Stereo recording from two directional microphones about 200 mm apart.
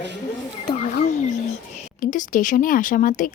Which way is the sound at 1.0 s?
35° left (ahead or behind).